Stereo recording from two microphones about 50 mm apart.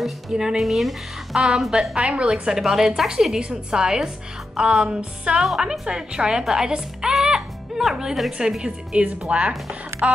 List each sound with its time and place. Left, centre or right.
0.0 s a woman's voice: centre
2.0 s music: right
2.3 s a woman's voice: centre
4.8 s music: right
5.6 s a woman's voice: centre
7.2 s music: centre
8.3 s a woman's voice: centre
9.3 s music: right
10.0 s a sound: right